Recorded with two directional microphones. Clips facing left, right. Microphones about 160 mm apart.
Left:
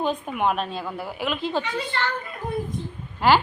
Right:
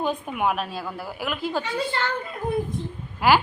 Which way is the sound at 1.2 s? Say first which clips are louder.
Left 2 dB; 5° right (ahead or behind).